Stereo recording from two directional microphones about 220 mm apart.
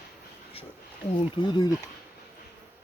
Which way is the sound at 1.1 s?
20° left (ahead or behind).